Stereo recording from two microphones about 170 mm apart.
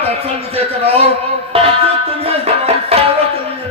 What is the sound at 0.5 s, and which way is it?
A man's voice, 35° right (ahead or behind).